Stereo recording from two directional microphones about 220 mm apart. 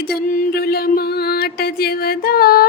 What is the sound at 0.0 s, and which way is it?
Music, 40° left (ahead or behind).